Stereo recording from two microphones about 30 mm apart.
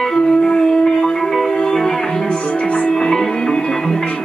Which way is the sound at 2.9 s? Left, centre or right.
Centre.